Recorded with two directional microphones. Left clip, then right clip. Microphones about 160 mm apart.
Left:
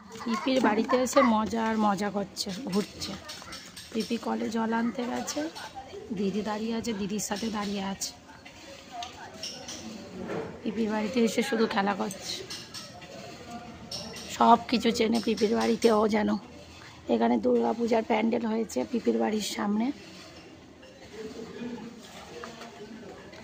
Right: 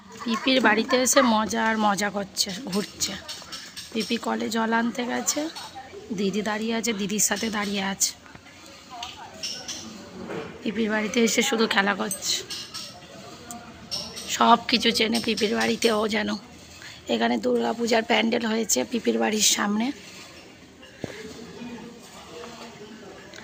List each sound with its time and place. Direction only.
0.3 s a woman's voice: centre (ahead or behind); by 2.6 s 15° left (ahead or behind)
2.6 s a woman's voice: 5° left (ahead or behind)
10.6 s a woman's voice: centre (ahead or behind)
14.3 s a woman's voice: 15° left (ahead or behind)
17.5 s a woman's voice: centre (ahead or behind)